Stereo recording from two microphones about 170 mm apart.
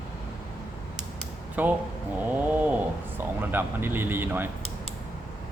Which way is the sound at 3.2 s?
10° right (ahead or behind).